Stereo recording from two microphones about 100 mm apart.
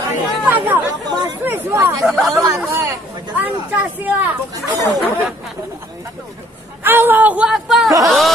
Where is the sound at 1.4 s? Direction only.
25° right (ahead or behind).